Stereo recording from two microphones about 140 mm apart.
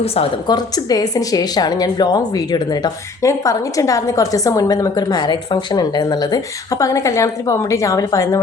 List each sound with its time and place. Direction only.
0.4 s a woman's voice: 30° left (ahead or behind)